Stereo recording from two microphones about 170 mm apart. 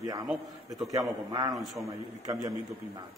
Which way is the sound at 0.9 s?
20° right (ahead or behind).